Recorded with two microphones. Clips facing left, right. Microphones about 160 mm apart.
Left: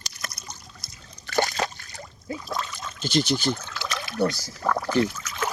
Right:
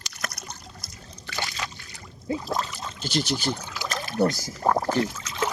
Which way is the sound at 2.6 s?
35° right (ahead or behind).